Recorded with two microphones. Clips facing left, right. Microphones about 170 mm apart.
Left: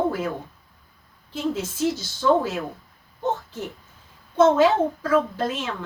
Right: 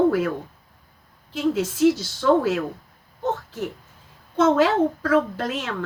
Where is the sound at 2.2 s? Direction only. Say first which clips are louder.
Right 2 dB; 70° right (ahead or behind).